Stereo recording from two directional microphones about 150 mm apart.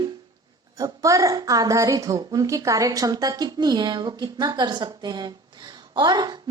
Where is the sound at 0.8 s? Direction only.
25° right (ahead or behind).